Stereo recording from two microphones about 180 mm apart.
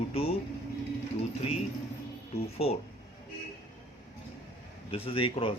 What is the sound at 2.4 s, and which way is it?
Speech, 35° left (ahead or behind).